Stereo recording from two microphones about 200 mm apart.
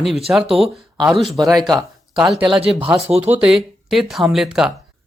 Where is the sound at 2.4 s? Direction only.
25° right (ahead or behind).